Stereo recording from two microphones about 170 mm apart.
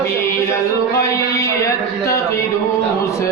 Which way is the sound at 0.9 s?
20° left (ahead or behind).